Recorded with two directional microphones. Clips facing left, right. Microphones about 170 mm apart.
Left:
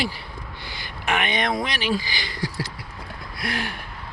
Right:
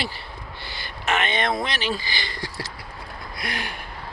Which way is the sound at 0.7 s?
15° left (ahead or behind).